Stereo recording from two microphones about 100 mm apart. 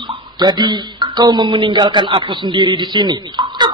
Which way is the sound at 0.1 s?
45° right (ahead or behind).